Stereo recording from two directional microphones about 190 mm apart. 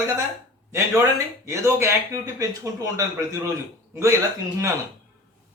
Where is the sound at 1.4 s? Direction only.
15° right (ahead or behind).